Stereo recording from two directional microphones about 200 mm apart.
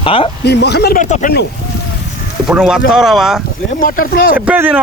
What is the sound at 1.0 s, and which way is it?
Speech, 40° left (ahead or behind).